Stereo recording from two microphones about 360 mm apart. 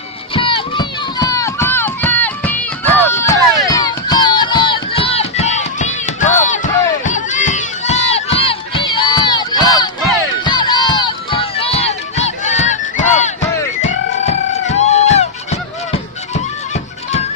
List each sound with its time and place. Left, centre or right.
0.3 s run: centre
3.5 s crowd: centre
14.7 s music: centre